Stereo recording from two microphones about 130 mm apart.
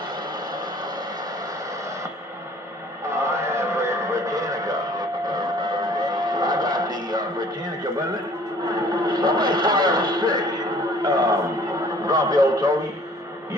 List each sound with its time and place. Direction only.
3.2 s a sound: 25° right (ahead or behind)
8.7 s speech: 35° right (ahead or behind)
11.0 s chant: 30° right (ahead or behind)
12.0 s speech: 30° right (ahead or behind)